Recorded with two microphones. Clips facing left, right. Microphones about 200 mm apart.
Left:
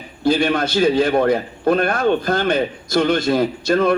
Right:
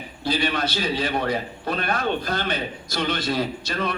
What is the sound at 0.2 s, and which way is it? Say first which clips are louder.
A man's voice: left 7 dB; 50° left (ahead or behind).